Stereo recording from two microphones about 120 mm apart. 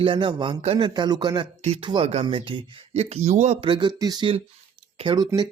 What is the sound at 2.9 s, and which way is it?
Speech, 60° right (ahead or behind).